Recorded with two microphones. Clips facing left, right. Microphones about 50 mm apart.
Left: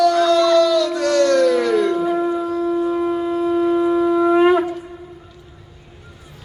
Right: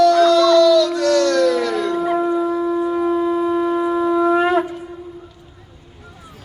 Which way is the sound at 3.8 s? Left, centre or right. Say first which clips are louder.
Left 1 dB; centre.